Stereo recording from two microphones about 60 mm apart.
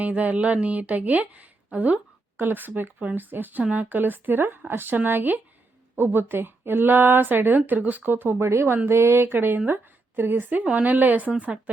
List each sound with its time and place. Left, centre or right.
0.0 s a woman's voice: right